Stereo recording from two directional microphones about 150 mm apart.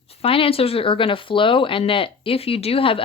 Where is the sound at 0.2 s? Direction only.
40° left (ahead or behind).